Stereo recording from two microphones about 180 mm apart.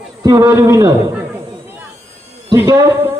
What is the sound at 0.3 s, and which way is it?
Speech, 20° right (ahead or behind).